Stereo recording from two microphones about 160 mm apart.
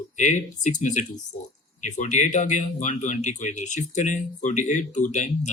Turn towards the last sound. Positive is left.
turn(degrees=50)  # may be behind; listen again after turning